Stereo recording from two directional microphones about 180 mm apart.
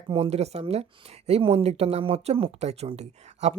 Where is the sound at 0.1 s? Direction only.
35° right (ahead or behind).